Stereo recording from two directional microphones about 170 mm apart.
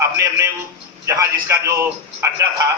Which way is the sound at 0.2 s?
15° right (ahead or behind).